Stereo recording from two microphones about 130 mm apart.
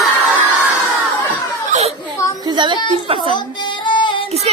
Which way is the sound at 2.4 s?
35° right (ahead or behind).